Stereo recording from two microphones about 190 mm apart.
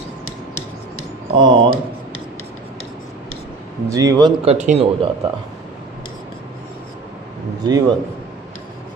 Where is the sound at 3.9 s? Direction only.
20° right (ahead or behind).